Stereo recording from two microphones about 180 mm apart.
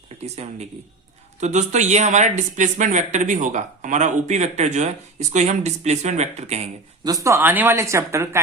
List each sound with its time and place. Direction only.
0.4 s speech: 35° right (ahead or behind)
7.0 s a woman's voice: 20° right (ahead or behind)